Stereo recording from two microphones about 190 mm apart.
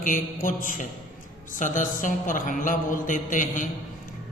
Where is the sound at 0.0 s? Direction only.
45° left (ahead or behind).